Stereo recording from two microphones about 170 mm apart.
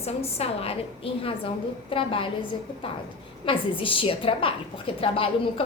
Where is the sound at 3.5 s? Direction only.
30° left (ahead or behind).